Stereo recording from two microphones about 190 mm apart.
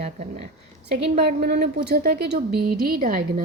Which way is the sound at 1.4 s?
55° right (ahead or behind).